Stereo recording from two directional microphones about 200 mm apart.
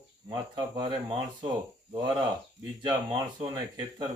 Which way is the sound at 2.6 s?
65° right (ahead or behind).